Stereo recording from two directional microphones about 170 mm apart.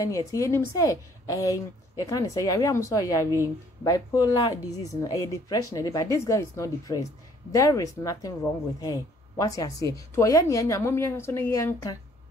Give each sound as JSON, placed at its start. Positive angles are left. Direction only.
{"t": 0.0, "sound": "a woman's voice", "side_deg": 20}